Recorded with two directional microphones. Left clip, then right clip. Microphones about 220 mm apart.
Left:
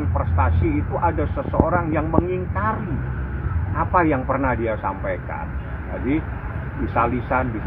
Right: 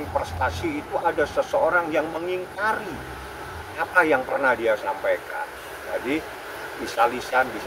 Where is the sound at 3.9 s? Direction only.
15° right (ahead or behind).